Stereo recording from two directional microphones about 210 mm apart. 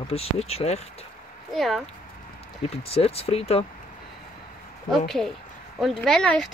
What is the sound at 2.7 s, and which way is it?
Speech, 30° left (ahead or behind).